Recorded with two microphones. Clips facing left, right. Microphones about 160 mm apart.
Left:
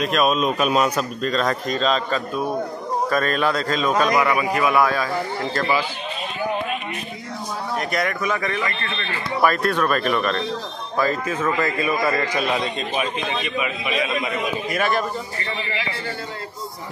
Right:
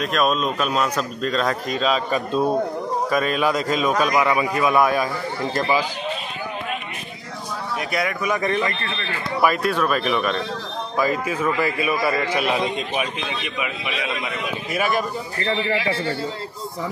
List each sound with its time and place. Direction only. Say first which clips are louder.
0.0 s a man's voice: left 1 dB; 5° left (ahead or behind)
1.2 s a man's voice: even; centre (ahead or behind)
7.9 s a man's voice: right 1 dB; 5° right (ahead or behind)
8.4 s a man's voice: right 3 dB; 25° right (ahead or behind)
9.4 s a man's voice: even; 10° right (ahead or behind)
14.7 s a man's voice: right 1 dB; 10° right (ahead or behind)